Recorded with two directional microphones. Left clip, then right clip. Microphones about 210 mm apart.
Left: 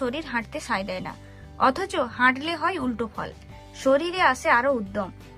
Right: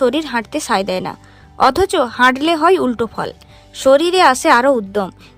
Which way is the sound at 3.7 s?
30° right (ahead or behind).